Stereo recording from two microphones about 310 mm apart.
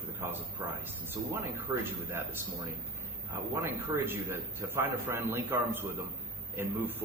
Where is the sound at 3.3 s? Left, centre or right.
Centre.